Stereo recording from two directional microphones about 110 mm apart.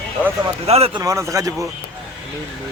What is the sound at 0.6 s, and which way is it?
Speech, 70° right (ahead or behind).